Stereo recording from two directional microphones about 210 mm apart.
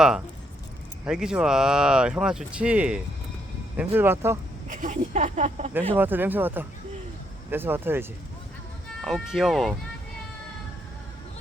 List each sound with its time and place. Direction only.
1.0 s speech: 5° right (ahead or behind)
4.7 s speech: 40° right (ahead or behind)
6.0 s speech: 10° right (ahead or behind)
9.0 s speech: centre (ahead or behind)